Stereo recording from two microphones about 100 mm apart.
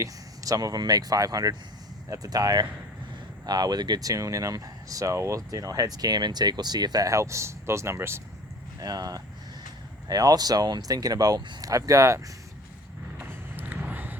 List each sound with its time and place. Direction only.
0.0 s speech: 35° right (ahead or behind)
8.8 s speech: 40° right (ahead or behind)
13.1 s vehicle: 15° right (ahead or behind)